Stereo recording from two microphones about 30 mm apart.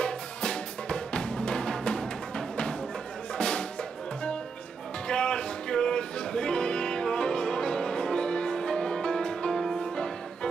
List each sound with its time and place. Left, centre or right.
0.0 s music: left
5.0 s music: left